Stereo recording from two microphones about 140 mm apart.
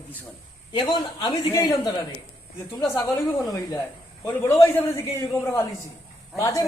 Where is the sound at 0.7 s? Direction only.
35° left (ahead or behind).